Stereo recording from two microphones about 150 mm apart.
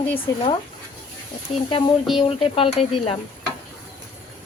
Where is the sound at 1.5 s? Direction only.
40° left (ahead or behind).